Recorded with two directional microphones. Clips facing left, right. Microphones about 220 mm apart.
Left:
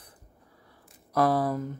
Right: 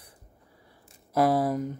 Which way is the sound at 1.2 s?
25° right (ahead or behind).